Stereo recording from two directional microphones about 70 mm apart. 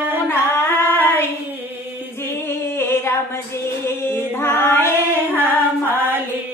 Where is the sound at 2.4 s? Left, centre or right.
Left.